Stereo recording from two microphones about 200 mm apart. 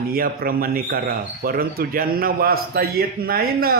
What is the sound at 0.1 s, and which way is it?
A man's voice, 45° right (ahead or behind).